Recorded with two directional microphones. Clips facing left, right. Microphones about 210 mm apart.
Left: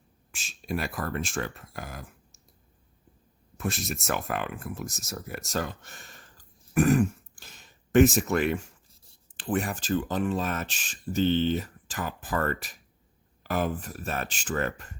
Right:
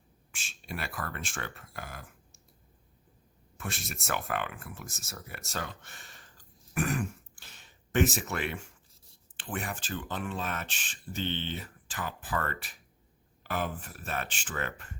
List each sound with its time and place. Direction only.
0.3 s speech: 40° left (ahead or behind)
3.6 s speech: 40° left (ahead or behind)